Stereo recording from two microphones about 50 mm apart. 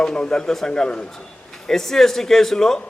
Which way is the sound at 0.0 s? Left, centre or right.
Centre.